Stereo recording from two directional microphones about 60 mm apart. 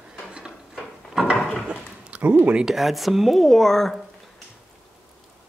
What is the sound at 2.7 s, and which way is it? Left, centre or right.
Speech, centre.